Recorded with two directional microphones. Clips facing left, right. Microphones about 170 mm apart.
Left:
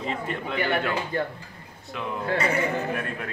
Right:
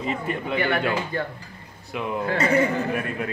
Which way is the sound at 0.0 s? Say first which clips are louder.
Right 3 dB; 5° right (ahead or behind).